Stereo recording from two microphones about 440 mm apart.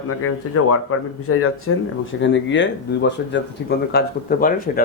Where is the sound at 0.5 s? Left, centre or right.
Left.